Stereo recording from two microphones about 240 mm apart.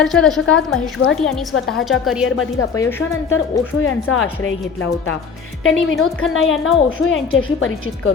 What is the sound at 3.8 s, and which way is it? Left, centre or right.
Speech, left.